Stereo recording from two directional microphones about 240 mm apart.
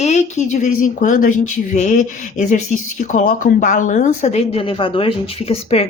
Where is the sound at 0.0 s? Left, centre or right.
Left.